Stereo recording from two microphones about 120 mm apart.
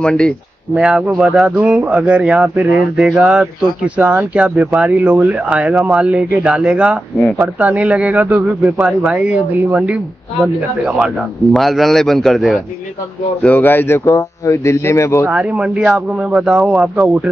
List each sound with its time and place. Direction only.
0.0 s speech: 5° left (ahead or behind)
0.7 s speech: 5° right (ahead or behind)
11.5 s speech: centre (ahead or behind)
13.4 s speech: 15° left (ahead or behind)
15.2 s speech: 10° right (ahead or behind)